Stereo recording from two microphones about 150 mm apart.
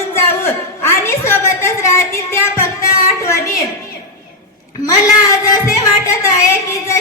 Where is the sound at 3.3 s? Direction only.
20° left (ahead or behind).